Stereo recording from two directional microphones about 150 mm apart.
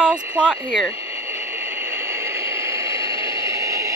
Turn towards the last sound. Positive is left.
turn(degrees=-20)  # may be behind; listen again after turning